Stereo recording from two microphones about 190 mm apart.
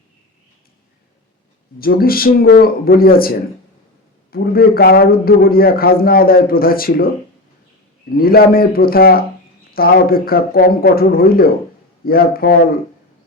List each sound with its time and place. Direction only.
1.8 s a man's voice: 50° left (ahead or behind)
8.1 s a man's voice: 50° left (ahead or behind)